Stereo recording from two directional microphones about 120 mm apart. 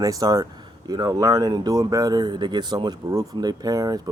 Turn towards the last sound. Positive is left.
turn(degrees=-30)  # may be behind; listen again after turning